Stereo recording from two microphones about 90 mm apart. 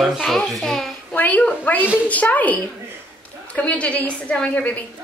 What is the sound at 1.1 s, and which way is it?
A woman's voice, 15° left (ahead or behind).